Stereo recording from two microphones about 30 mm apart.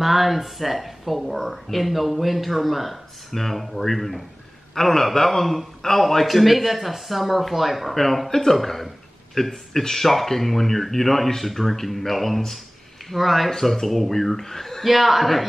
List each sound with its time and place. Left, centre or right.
0.0 s a man's voice: centre
8.3 s a man's voice: centre
8.5 s a man's voice: centre
13.5 s a man's voice: centre
14.9 s speech: centre